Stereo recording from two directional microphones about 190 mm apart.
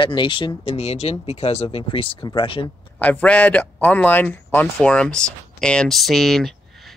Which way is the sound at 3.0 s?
5° left (ahead or behind).